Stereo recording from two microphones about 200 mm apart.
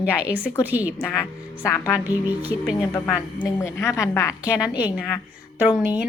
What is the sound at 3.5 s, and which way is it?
A woman's voice, 10° left (ahead or behind).